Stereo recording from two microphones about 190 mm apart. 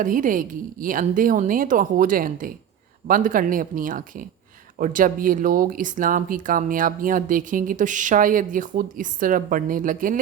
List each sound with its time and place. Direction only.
0.0 s speech: 45° right (ahead or behind)